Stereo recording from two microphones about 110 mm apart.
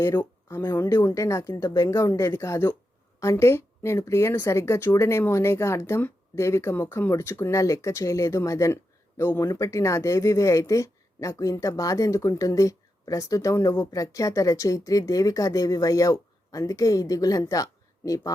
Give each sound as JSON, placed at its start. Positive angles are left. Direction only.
{"t": 0.0, "sound": "speech", "side_deg": 25}